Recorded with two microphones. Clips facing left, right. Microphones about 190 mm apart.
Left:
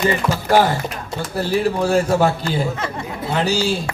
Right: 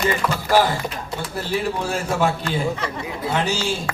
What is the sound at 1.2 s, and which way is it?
Speech, 40° left (ahead or behind).